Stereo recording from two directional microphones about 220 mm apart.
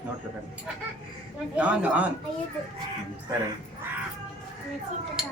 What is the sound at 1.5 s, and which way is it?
Speech, 5° right (ahead or behind).